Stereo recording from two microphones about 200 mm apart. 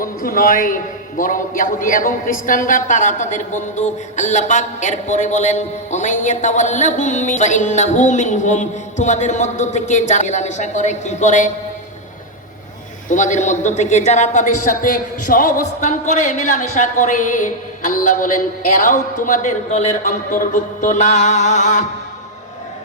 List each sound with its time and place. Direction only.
0.0 s a man's voice: 45° left (ahead or behind)
13.1 s a woman's voice: 40° left (ahead or behind)